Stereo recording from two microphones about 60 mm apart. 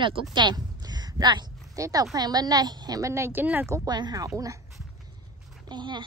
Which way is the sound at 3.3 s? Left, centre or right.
Right.